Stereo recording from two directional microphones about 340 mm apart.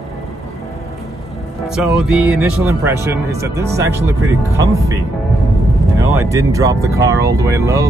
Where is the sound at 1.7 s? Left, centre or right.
Centre.